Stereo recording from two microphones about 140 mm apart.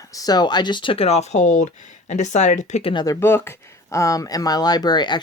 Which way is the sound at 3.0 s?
20° left (ahead or behind).